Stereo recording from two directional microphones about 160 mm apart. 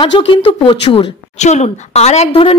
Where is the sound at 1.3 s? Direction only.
45° left (ahead or behind).